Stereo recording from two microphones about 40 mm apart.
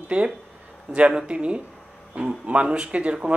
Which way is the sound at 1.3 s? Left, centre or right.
Right.